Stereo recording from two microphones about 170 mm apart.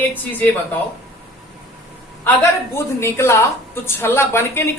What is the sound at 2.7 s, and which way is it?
A woman's voice, 15° left (ahead or behind).